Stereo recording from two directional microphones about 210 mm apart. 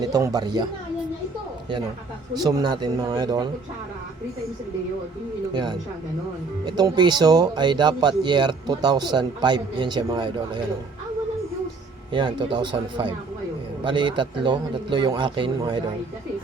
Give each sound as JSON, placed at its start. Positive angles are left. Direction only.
{"t": 0.0, "sound": "speech", "side_deg": -15}
{"t": 2.3, "sound": "speech", "side_deg": -20}
{"t": 6.7, "sound": "speech", "side_deg": -20}
{"t": 12.1, "sound": "speech", "side_deg": -20}